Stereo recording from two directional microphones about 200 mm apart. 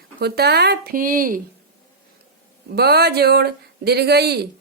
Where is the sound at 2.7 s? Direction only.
55° right (ahead or behind).